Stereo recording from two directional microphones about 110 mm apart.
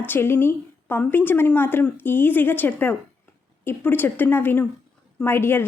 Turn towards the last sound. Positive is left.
turn(degrees=20)  # may be behind; listen again after turning